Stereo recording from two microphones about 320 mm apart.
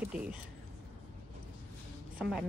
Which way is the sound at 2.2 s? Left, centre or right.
Centre.